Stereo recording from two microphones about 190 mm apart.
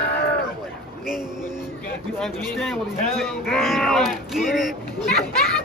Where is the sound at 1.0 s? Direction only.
5° right (ahead or behind).